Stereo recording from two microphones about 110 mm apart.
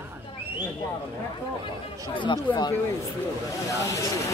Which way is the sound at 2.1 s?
45° left (ahead or behind).